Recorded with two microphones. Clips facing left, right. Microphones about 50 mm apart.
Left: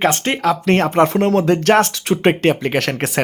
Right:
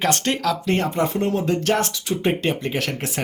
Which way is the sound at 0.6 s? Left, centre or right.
Left.